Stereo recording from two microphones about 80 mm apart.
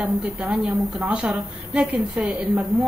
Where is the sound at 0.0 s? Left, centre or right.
Centre.